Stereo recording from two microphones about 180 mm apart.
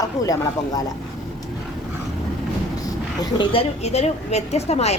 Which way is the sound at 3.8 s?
35° left (ahead or behind).